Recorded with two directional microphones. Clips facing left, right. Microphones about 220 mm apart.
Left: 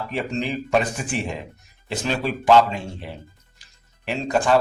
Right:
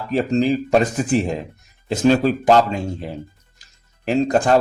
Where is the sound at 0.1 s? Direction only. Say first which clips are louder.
Right 10 dB; 40° right (ahead or behind).